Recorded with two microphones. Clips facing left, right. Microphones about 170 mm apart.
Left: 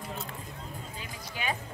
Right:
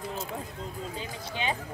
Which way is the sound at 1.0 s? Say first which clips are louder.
Right 3 dB; 30° right (ahead or behind).